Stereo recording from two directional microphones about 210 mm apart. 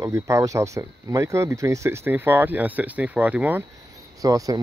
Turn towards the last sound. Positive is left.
turn(degrees=-15)  # may be behind; listen again after turning